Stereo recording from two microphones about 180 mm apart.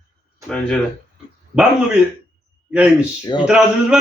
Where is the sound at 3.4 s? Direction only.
5° right (ahead or behind).